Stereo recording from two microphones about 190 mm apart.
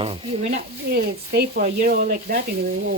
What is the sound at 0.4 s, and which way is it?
Speech, 55° right (ahead or behind).